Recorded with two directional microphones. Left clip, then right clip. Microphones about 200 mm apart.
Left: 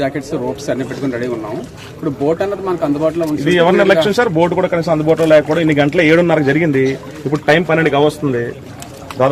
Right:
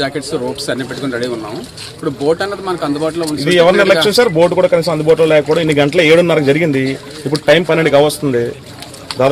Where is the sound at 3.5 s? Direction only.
55° right (ahead or behind).